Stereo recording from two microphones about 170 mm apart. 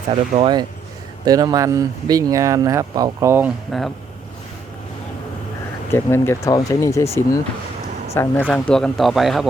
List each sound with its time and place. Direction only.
0.1 s speech: 30° right (ahead or behind); by 3.5 s 15° right (ahead or behind)
3.7 s speech: centre (ahead or behind)
5.9 s speech: 15° left (ahead or behind); by 9.5 s centre (ahead or behind)